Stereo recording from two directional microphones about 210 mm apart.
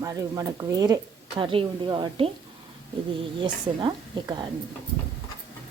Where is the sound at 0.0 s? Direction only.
15° right (ahead or behind).